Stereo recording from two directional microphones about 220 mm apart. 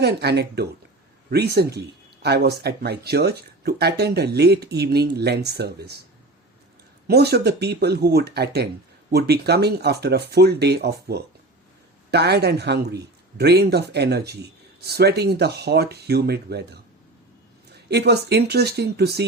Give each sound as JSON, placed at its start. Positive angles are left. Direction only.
{"t": 0.0, "sound": "speech", "side_deg": -50}
{"t": 7.1, "sound": "speech", "side_deg": -45}
{"t": 17.8, "sound": "speech", "side_deg": -50}